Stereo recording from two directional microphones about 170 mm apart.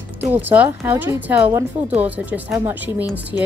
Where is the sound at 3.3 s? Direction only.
25° left (ahead or behind).